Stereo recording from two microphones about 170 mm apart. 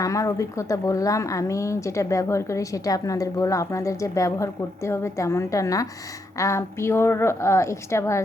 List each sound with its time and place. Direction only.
0.0 s a woman's voice: 20° left (ahead or behind)